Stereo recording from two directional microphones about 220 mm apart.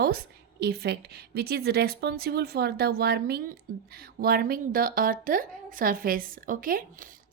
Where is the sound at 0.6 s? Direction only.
45° right (ahead or behind).